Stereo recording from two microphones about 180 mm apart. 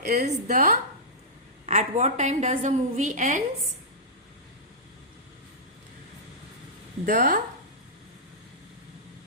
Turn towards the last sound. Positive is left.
turn(degrees=-50)  # may be behind; listen again after turning